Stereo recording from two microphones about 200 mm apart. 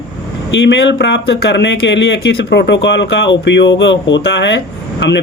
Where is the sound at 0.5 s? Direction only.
65° left (ahead or behind).